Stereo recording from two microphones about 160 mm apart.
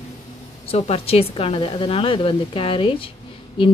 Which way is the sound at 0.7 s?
40° left (ahead or behind).